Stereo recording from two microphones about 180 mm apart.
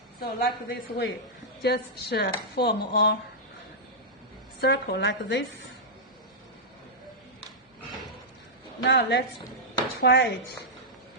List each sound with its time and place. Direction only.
0.2 s speech: 55° left (ahead or behind)
4.6 s a woman's voice: 70° left (ahead or behind)
8.8 s a woman's voice: 65° left (ahead or behind)